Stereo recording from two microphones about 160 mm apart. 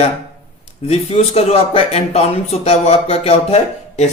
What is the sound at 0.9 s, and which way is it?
Speech, 40° left (ahead or behind).